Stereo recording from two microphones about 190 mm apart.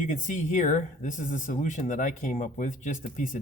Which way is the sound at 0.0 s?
40° left (ahead or behind).